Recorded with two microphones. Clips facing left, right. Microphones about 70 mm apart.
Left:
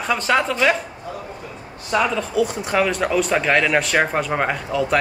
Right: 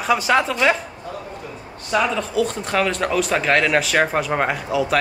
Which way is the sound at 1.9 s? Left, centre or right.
Centre.